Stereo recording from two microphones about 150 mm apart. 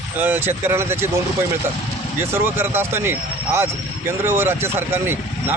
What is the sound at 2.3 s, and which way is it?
Speech, 15° right (ahead or behind).